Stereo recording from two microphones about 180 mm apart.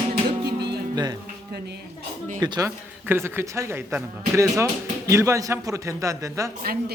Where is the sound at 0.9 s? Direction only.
25° right (ahead or behind).